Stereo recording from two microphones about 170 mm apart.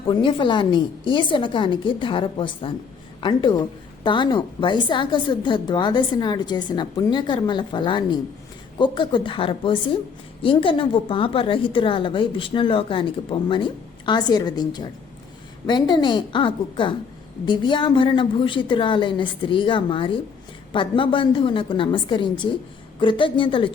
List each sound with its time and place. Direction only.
0.1 s a woman's voice: 30° left (ahead or behind)